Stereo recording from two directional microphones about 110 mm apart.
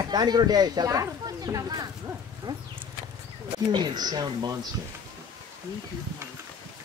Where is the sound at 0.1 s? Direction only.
40° right (ahead or behind).